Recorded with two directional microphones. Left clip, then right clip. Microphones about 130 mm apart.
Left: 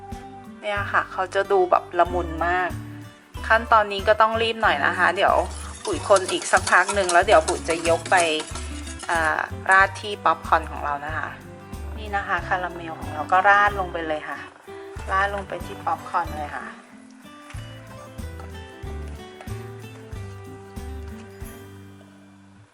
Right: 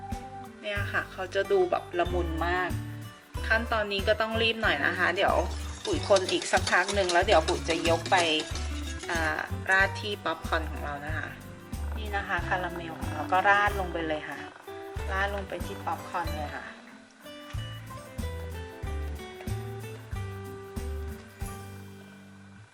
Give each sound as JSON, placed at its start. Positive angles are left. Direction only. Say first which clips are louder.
{"t": 0.6, "sound": "speech", "louder": "left 8 dB", "side_deg": 30}